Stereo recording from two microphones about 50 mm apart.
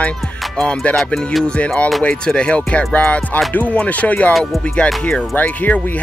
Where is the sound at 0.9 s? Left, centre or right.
Left.